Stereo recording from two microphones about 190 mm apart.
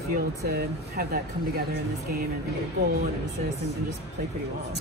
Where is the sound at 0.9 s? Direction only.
55° right (ahead or behind).